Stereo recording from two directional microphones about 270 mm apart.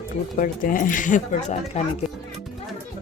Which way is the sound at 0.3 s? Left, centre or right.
Left.